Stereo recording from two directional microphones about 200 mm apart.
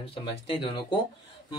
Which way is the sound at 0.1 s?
25° left (ahead or behind).